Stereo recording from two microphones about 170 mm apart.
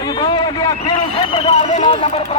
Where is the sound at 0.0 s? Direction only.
25° left (ahead or behind); by 1.8 s 40° left (ahead or behind).